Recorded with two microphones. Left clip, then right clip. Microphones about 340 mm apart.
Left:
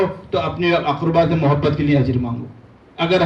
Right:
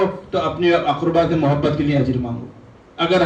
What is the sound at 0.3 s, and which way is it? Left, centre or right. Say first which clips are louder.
A man's voice: right 2 dB; centre.